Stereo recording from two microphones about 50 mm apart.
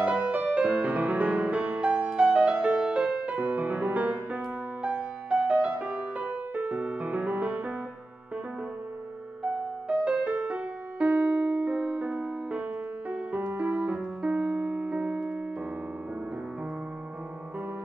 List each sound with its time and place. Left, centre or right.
0.0 s music: right
9.4 s music: right
13.6 s keyboard: right